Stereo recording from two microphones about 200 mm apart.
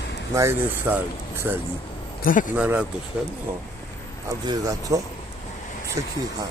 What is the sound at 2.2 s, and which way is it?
Speech, 40° left (ahead or behind).